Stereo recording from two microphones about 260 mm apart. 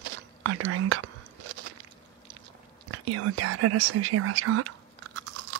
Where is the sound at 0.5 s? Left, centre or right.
Right.